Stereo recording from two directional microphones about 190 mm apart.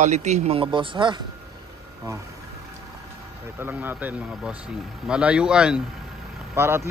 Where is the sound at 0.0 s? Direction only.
40° right (ahead or behind).